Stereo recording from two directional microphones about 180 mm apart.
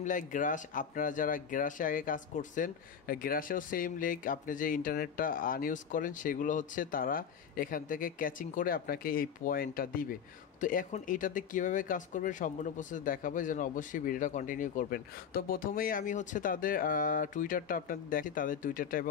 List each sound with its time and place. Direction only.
0.0 s speech: 45° left (ahead or behind)